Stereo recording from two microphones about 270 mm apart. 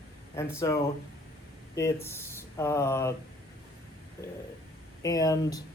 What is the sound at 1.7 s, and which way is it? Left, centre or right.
Speech, centre.